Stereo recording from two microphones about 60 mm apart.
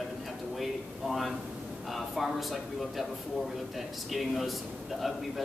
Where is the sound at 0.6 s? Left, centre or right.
Centre.